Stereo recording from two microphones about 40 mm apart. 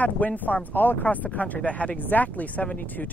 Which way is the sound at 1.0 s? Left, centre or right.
Left.